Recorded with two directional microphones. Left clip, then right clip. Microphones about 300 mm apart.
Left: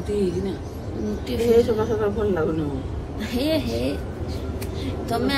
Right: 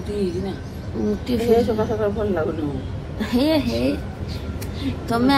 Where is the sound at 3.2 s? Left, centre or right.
Centre.